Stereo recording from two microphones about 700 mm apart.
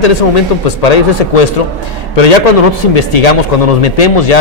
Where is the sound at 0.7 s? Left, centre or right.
Left.